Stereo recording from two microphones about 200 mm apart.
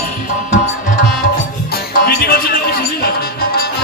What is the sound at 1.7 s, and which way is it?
Music, 50° left (ahead or behind).